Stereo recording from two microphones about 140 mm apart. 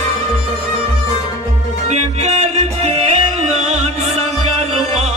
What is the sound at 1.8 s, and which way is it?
Music, 55° right (ahead or behind).